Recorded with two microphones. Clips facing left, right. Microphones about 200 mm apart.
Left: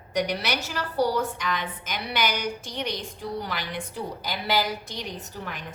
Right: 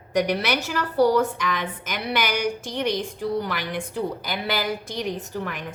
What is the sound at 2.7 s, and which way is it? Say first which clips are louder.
A woman's voice: right 7 dB; 60° right (ahead or behind).